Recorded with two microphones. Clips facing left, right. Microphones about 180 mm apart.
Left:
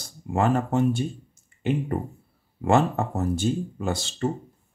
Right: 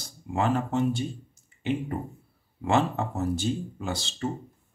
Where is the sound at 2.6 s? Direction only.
50° left (ahead or behind).